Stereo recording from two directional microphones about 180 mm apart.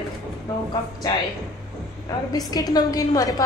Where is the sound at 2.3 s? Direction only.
20° left (ahead or behind).